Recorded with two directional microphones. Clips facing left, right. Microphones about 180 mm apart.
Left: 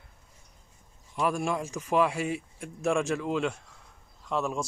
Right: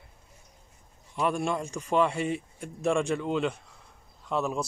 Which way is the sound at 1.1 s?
Centre (ahead or behind).